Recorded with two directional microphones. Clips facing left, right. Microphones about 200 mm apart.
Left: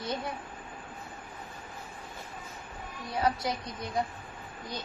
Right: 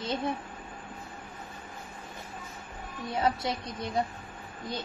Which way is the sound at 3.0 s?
25° right (ahead or behind).